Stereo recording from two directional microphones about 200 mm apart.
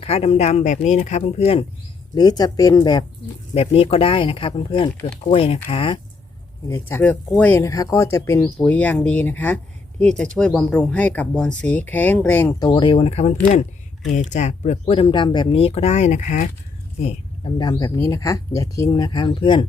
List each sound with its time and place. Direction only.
0.0 s speech: 30° left (ahead or behind)
3.5 s speech: 30° left (ahead or behind)
6.7 s speech: 10° left (ahead or behind)
8.4 s speech: 5° left (ahead or behind); by 16.5 s 40° left (ahead or behind)
17.0 s speech: 30° left (ahead or behind)